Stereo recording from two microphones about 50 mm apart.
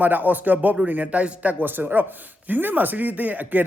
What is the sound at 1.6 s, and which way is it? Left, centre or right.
Speech, right.